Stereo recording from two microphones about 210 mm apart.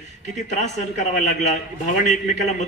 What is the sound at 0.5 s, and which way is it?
A man's voice, 35° left (ahead or behind).